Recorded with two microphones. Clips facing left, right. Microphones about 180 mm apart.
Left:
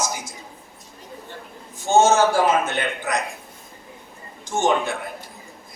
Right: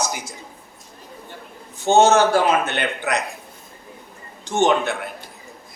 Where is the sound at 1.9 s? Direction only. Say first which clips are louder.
Right 2 dB; 65° right (ahead or behind).